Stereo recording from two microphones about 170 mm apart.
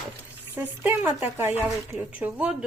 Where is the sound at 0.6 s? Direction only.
10° right (ahead or behind).